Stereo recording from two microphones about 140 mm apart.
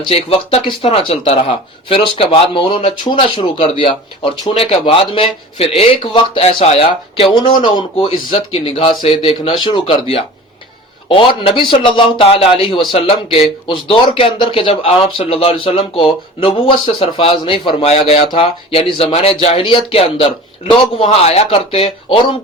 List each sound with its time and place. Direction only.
0.1 s speech: 45° left (ahead or behind)